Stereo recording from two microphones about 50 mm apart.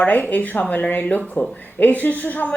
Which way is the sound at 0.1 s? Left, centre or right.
Left.